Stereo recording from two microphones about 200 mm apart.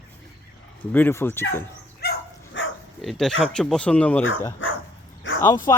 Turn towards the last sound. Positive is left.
turn(degrees=15)  # may be behind; listen again after turning